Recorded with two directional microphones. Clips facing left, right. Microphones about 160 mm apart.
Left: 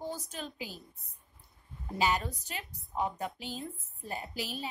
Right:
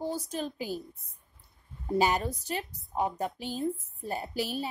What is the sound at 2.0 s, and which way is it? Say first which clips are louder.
A woman's voice: right 3 dB; 40° right (ahead or behind).